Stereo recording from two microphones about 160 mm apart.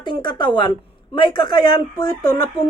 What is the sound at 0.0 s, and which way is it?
A woman's voice, 30° left (ahead or behind).